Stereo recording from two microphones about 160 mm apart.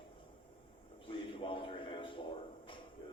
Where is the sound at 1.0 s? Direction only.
35° left (ahead or behind).